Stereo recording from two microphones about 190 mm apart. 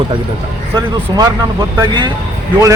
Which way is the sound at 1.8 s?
25° right (ahead or behind).